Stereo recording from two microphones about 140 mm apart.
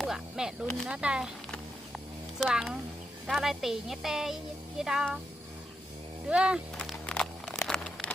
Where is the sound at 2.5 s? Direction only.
5° right (ahead or behind).